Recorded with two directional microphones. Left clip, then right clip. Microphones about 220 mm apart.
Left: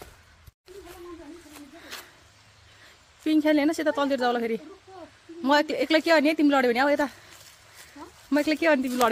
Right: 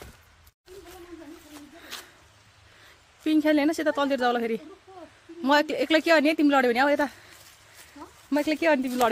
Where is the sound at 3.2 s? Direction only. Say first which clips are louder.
Even; 10° right (ahead or behind).